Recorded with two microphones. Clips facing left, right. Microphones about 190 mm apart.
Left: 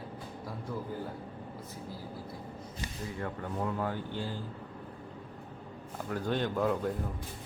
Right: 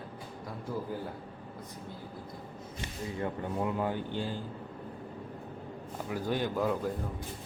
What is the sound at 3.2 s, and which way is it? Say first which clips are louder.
Speech: right 3 dB; 20° right (ahead or behind).